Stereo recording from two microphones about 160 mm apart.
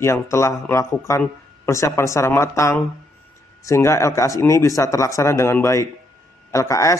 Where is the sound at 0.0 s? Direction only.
15° left (ahead or behind).